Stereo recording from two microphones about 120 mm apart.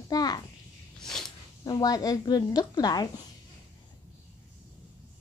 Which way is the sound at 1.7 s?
35° left (ahead or behind).